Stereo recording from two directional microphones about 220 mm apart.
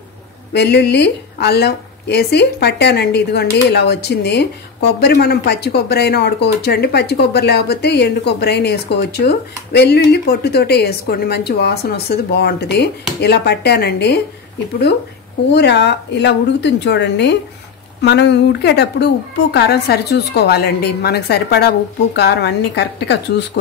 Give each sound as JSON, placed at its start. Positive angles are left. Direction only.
{"t": 0.5, "sound": "speech", "side_deg": 50}
{"t": 15.5, "sound": "speech", "side_deg": 50}